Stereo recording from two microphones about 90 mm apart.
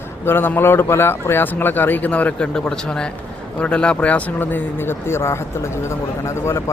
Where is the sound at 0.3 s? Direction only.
25° left (ahead or behind).